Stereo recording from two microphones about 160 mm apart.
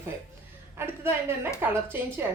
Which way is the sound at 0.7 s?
15° right (ahead or behind).